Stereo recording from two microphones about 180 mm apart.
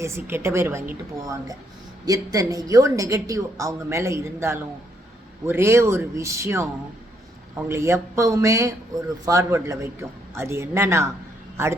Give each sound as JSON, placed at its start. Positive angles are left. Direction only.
{"t": 0.0, "sound": "a man's voice", "side_deg": -15}